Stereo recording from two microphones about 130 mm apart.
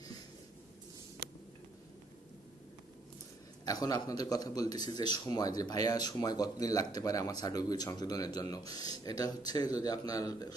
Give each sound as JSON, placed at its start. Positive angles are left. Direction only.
{"t": 3.7, "sound": "a man's voice", "side_deg": 30}